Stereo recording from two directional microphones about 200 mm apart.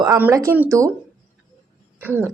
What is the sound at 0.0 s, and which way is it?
Speech, 15° right (ahead or behind).